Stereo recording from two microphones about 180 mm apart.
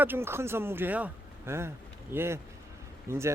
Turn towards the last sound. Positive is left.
turn(degrees=-15)  # may be behind; listen again after turning